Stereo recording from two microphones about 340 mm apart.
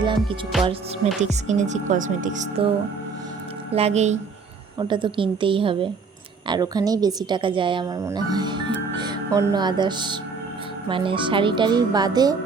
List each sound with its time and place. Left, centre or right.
0.0 s music: centre
1.2 s speech: centre
3.7 s a woman's voice: centre